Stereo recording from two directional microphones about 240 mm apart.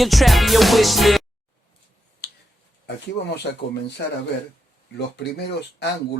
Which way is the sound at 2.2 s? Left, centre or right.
Left.